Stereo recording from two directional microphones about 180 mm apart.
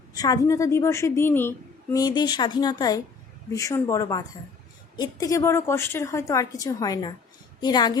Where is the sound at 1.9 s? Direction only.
25° left (ahead or behind).